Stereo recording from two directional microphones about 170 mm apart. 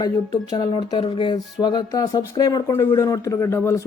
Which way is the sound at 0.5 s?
25° left (ahead or behind).